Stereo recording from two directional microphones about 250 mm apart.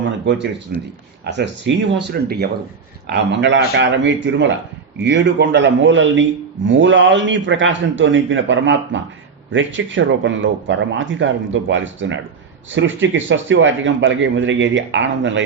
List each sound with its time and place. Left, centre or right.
0.7 s speech: right